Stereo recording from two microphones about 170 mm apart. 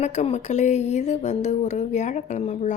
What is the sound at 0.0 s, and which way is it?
A woman's voice, 45° left (ahead or behind).